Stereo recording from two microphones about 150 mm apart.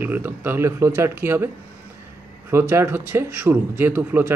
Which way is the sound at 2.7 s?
15° right (ahead or behind).